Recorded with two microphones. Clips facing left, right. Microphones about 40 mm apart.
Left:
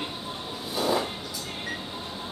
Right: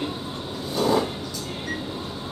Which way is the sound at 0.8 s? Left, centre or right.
Centre.